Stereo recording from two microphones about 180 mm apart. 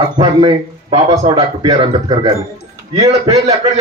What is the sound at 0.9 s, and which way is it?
A man's voice, 35° right (ahead or behind).